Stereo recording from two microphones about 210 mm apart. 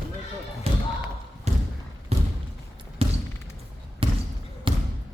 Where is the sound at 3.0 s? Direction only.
30° right (ahead or behind).